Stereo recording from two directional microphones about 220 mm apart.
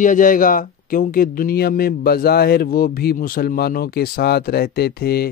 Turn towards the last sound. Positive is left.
turn(degrees=45)  # may be behind; listen again after turning